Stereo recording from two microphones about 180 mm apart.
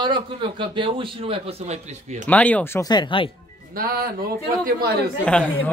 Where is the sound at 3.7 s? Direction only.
55° right (ahead or behind).